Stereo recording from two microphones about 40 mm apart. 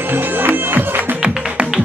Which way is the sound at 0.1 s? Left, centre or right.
Right.